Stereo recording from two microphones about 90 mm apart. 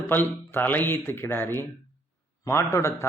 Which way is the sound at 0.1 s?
20° left (ahead or behind).